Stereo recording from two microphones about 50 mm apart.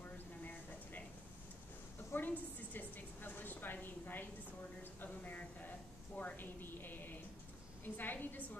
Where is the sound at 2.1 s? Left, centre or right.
Left.